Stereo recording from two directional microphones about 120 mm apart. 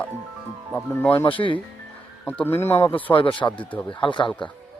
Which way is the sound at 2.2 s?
15° left (ahead or behind).